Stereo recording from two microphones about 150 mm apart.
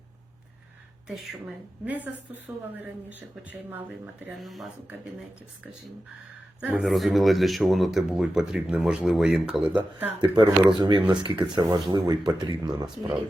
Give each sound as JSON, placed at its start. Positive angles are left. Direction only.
{"t": 1.0, "sound": "speech", "side_deg": 0}
{"t": 2.7, "sound": "speech", "side_deg": -10}
{"t": 4.4, "sound": "speech", "side_deg": 0}
{"t": 6.6, "sound": "speech", "side_deg": -5}
{"t": 10.2, "sound": "speech", "side_deg": -30}